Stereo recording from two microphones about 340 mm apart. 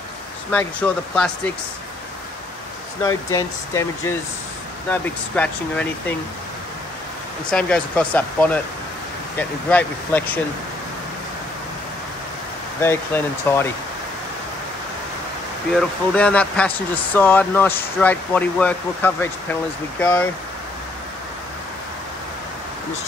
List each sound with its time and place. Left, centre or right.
0.5 s speech: centre
3.0 s speech: centre
5.0 s speech: centre
7.5 s speech: centre
12.8 s speech: centre
15.7 s speech: centre